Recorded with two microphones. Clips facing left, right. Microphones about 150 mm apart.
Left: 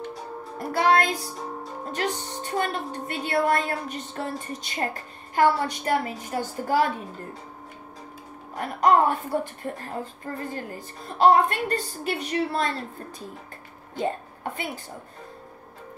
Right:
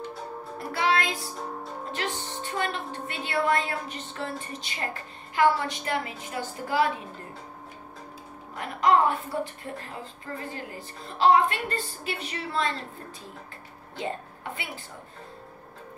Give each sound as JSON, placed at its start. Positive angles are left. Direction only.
{"t": 0.6, "sound": "music", "side_deg": 45}
{"t": 2.0, "sound": "a woman's voice", "side_deg": 40}
{"t": 8.5, "sound": "a woman's voice", "side_deg": 45}
{"t": 13.9, "sound": "speech", "side_deg": 45}